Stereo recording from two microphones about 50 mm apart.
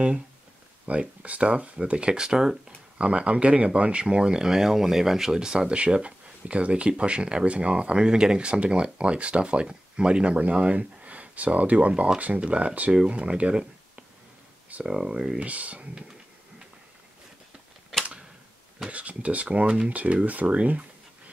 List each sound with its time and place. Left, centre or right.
0.8 s speech: right; by 2.6 s centre
3.0 s speech: right
14.9 s speech: centre
15.3 s speech: right
18.9 s speech: right